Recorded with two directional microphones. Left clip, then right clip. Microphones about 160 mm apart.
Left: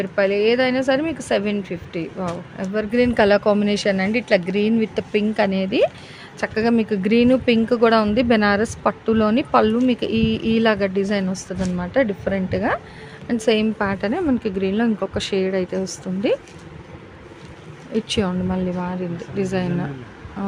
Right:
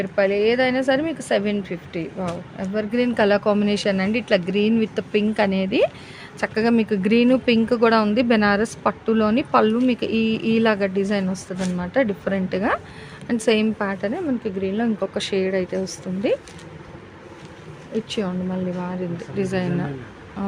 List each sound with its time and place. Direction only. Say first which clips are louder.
0.0 s speech: left 1 dB; 10° left (ahead or behind)
13.7 s speech: left 3 dB; 15° left (ahead or behind)
17.9 s speech: left 3 dB; 25° left (ahead or behind)
19.4 s speech: left 1 dB; 10° left (ahead or behind)